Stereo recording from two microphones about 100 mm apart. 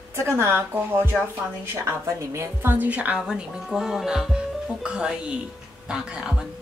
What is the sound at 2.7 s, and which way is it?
Speech, 15° right (ahead or behind).